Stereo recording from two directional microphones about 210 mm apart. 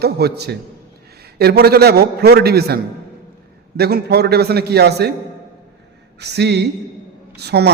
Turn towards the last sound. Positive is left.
turn(degrees=-50)  # may be behind; listen again after turning